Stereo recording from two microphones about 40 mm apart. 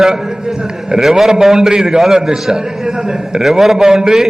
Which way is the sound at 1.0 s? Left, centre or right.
Centre.